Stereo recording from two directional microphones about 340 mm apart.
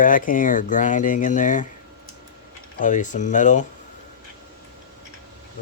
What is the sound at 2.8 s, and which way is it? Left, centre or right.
Speech, left.